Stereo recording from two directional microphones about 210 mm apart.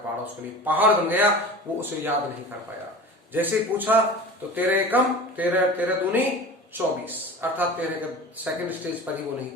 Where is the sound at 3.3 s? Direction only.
10° right (ahead or behind).